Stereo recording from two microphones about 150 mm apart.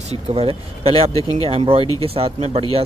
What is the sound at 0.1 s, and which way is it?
Speech, 40° right (ahead or behind).